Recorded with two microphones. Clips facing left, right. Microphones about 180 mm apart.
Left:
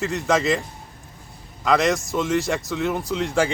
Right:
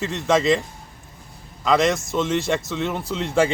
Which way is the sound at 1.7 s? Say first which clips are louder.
Right 1 dB; centre (ahead or behind).